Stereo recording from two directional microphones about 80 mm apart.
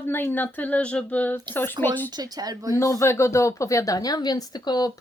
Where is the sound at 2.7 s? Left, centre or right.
Left.